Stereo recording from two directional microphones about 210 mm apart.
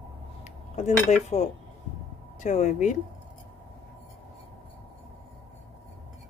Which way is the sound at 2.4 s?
35° left (ahead or behind).